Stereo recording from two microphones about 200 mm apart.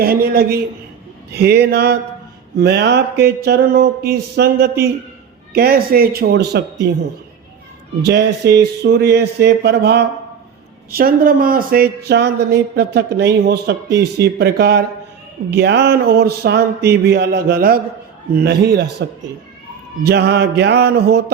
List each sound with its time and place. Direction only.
0.0 s a sound: 45° right (ahead or behind)
8.0 s speech: 55° right (ahead or behind)
10.9 s speech: 45° right (ahead or behind)
15.4 s a sound: 55° right (ahead or behind)
18.4 s speech: 55° right (ahead or behind)
20.1 s speech: 55° right (ahead or behind)